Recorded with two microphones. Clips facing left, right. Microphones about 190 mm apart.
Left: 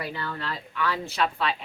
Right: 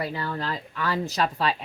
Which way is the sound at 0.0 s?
35° right (ahead or behind).